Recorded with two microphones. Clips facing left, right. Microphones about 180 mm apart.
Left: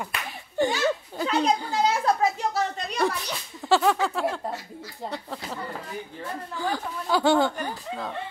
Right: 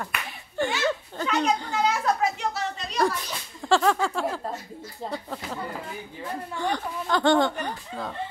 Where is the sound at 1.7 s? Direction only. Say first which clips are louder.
Left 1 dB; 35° left (ahead or behind).